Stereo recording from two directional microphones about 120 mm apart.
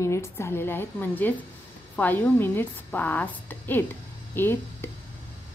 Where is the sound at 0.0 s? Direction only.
25° left (ahead or behind).